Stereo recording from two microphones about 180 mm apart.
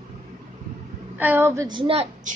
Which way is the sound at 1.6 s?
30° right (ahead or behind).